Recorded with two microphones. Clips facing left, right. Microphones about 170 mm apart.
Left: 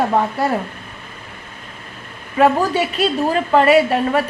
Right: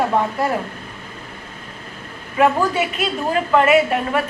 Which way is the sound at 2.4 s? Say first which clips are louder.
Left 2 dB; 35° left (ahead or behind).